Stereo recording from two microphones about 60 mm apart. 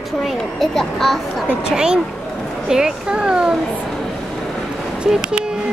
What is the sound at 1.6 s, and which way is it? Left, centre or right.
Speech, centre.